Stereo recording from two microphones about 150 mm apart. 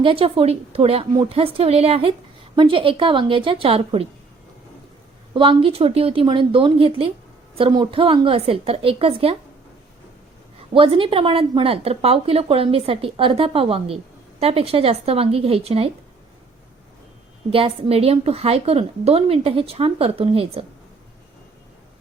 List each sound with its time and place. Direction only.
0.0 s a woman's voice: 35° right (ahead or behind)
5.3 s a woman's voice: 35° right (ahead or behind)
10.8 s a woman's voice: 35° right (ahead or behind)
17.5 s a woman's voice: 40° right (ahead or behind)